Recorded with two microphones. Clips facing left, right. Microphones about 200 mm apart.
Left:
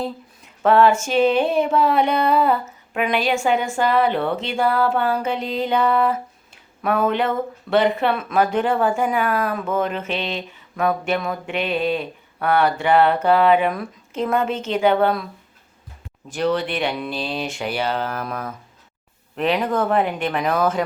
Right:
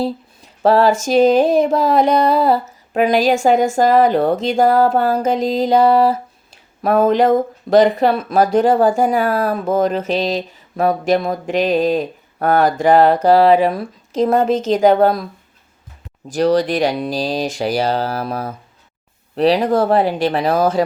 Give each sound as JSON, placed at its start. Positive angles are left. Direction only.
{"t": 0.0, "sound": "speech", "side_deg": -35}
{"t": 16.3, "sound": "speech", "side_deg": -40}